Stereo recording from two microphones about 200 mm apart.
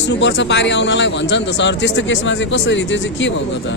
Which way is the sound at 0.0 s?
65° left (ahead or behind).